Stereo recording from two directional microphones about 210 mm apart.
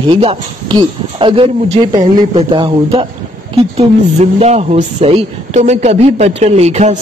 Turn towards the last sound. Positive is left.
turn(degrees=-35)  # may be behind; listen again after turning